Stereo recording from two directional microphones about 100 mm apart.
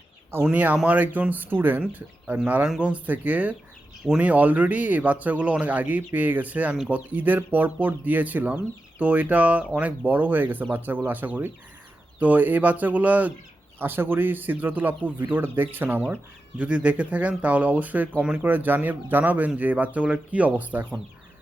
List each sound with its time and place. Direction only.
0.4 s speech: 15° right (ahead or behind)